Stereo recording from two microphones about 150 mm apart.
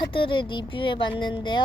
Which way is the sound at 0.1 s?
35° left (ahead or behind).